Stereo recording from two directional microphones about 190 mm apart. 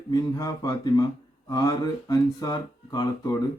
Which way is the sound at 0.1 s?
20° left (ahead or behind).